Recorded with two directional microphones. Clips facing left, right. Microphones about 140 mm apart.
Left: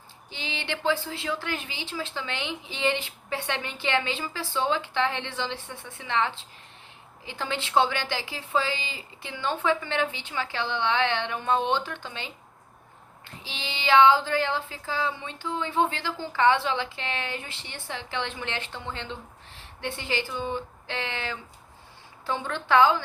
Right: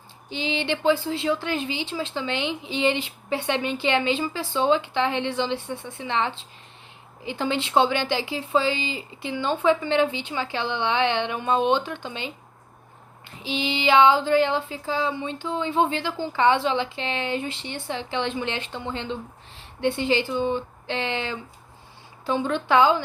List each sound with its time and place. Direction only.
0.3 s a woman's voice: 20° right (ahead or behind)